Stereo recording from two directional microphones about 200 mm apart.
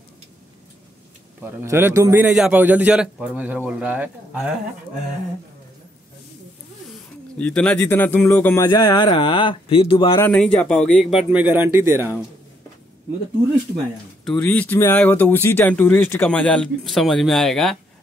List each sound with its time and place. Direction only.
1.4 s a man's voice: 10° right (ahead or behind)
6.9 s speech: 5° left (ahead or behind); by 10.2 s 25° left (ahead or behind)
10.2 s speech: 5° left (ahead or behind); by 12.1 s 10° right (ahead or behind)
14.2 s speech: 5° left (ahead or behind)